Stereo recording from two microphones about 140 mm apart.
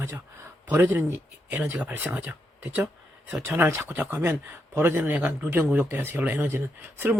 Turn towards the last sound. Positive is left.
turn(degrees=-15)  # may be behind; listen again after turning